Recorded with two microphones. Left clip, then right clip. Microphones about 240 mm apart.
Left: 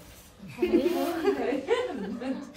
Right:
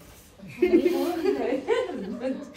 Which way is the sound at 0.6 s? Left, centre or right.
Centre.